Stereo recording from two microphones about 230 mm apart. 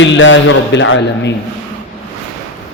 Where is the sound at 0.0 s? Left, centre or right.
Left.